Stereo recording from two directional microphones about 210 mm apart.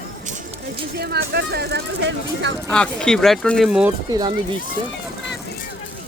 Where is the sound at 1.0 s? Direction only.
50° right (ahead or behind).